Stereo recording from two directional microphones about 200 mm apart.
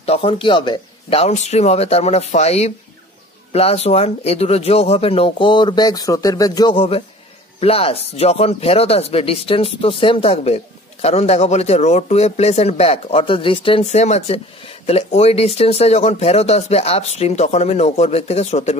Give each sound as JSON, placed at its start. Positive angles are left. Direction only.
{"t": 0.0, "sound": "speech", "side_deg": 30}